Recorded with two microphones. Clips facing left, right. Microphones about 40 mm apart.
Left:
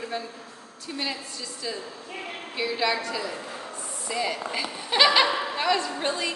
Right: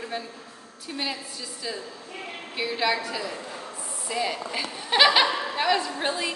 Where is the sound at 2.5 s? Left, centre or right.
Centre.